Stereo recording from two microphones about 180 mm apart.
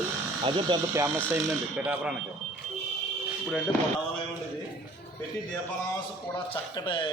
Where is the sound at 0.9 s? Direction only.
15° right (ahead or behind).